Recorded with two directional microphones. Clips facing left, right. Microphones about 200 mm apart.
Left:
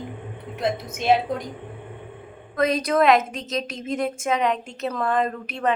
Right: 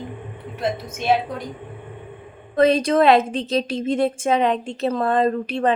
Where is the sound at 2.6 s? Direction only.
30° right (ahead or behind).